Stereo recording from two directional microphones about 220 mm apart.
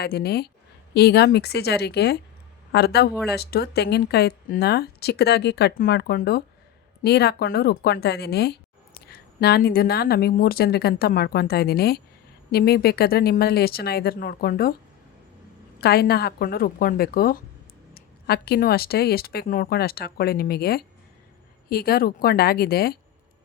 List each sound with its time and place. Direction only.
0.0 s speech: 45° left (ahead or behind)
15.8 s speech: 45° left (ahead or behind)